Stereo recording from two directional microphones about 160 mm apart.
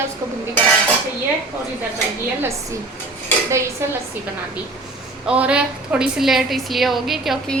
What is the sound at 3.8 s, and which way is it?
Speech, 15° right (ahead or behind).